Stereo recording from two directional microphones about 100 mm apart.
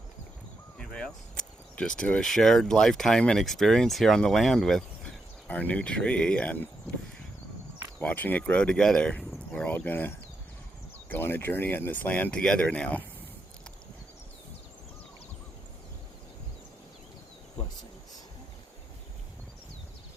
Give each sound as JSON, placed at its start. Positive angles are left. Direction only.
{"t": 0.8, "sound": "a sound", "side_deg": 5}
{"t": 1.7, "sound": "speech", "side_deg": 10}
{"t": 7.9, "sound": "speech", "side_deg": 15}
{"t": 11.1, "sound": "speech", "side_deg": 20}